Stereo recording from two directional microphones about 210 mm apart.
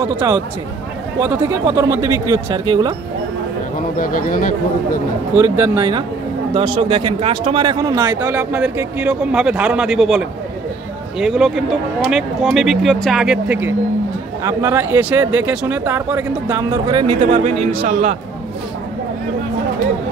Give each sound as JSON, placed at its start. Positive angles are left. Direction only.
{"t": 0.0, "sound": "a man's voice", "side_deg": -20}
{"t": 4.0, "sound": "speech", "side_deg": 40}
{"t": 5.4, "sound": "a man's voice", "side_deg": -15}
{"t": 17.3, "sound": "a man's voice", "side_deg": -30}